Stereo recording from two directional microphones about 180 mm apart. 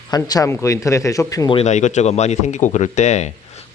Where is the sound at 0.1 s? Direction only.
20° left (ahead or behind).